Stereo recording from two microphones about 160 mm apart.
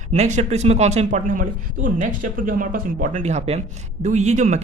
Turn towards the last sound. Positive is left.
turn(degrees=-50)  # may be behind; listen again after turning